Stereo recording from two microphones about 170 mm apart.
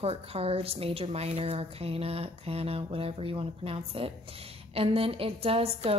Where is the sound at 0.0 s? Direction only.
35° right (ahead or behind).